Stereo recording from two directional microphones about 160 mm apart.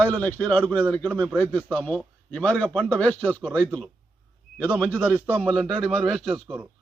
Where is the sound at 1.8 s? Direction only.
5° left (ahead or behind).